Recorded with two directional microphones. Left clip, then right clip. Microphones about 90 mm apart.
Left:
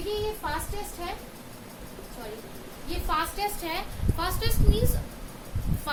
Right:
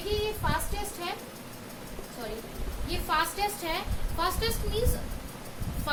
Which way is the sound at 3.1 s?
15° left (ahead or behind).